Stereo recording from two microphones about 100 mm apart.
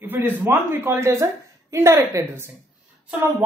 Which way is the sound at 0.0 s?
20° right (ahead or behind).